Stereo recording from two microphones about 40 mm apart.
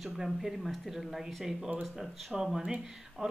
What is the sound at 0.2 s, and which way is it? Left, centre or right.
Speech, centre.